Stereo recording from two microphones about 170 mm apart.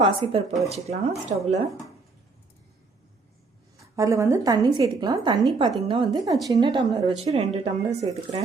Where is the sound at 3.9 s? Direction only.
20° right (ahead or behind); by 8.4 s 40° right (ahead or behind).